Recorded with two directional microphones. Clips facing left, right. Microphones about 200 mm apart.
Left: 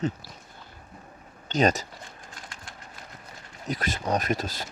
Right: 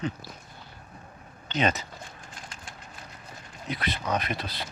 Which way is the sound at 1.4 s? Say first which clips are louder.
Left 4 dB; 40° left (ahead or behind).